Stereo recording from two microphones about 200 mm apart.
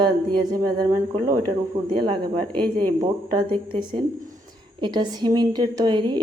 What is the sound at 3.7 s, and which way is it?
A woman's voice, 25° right (ahead or behind).